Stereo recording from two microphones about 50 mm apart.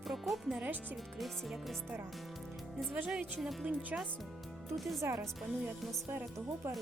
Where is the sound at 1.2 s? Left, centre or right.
Centre.